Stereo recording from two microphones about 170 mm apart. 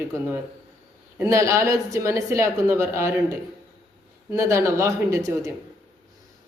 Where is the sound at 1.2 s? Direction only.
15° right (ahead or behind).